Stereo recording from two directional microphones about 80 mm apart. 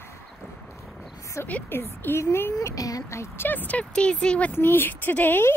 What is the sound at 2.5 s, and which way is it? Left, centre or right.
Speech, left.